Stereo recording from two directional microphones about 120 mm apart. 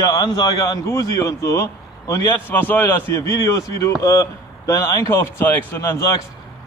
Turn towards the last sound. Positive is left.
turn(degrees=25)  # may be behind; listen again after turning